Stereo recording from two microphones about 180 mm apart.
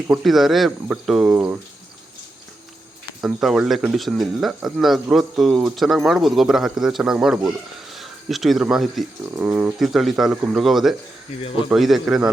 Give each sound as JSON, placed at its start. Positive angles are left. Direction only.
{"t": 0.1, "sound": "speech", "side_deg": 0}
{"t": 3.2, "sound": "speech", "side_deg": -5}
{"t": 11.4, "sound": "speech", "side_deg": 30}
{"t": 11.7, "sound": "speech", "side_deg": 0}